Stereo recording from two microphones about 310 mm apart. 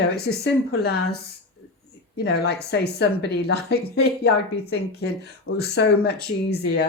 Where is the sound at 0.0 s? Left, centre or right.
Left.